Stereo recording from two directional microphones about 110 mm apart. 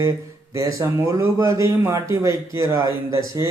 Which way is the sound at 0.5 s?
30° right (ahead or behind).